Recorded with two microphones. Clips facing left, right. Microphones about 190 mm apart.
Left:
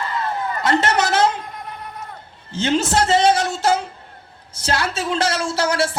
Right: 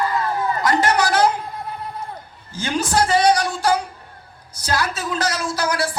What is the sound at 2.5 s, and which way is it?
A man's voice, 25° left (ahead or behind).